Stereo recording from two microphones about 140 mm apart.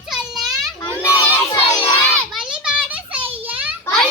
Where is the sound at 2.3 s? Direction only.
5° right (ahead or behind).